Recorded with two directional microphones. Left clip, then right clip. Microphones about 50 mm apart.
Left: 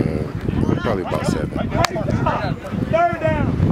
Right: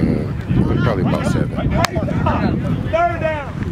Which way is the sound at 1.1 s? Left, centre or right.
Centre.